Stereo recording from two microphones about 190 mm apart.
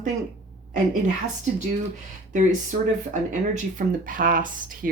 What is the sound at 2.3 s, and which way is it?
Speech, 40° right (ahead or behind).